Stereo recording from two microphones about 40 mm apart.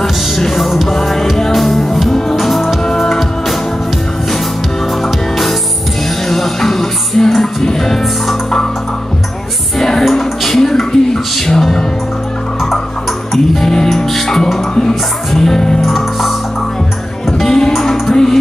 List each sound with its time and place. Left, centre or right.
0.6 s music: centre
6.2 s music: centre
9.8 s music: centre
13.9 s music: centre
15.8 s music: centre
17.5 s music: centre